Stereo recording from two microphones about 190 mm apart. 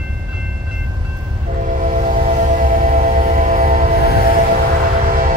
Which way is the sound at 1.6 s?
45° right (ahead or behind).